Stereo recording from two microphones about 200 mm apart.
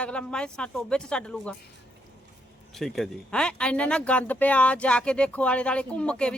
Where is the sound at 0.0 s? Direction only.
5° left (ahead or behind).